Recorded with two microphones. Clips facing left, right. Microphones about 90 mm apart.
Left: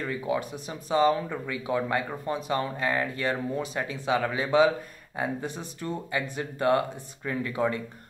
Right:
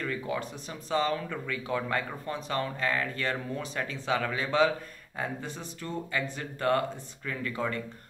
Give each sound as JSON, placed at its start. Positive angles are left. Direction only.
{"t": 0.0, "sound": "speech", "side_deg": 15}